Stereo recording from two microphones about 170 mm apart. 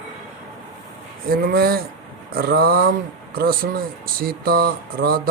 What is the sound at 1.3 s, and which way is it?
Speech, 60° right (ahead or behind).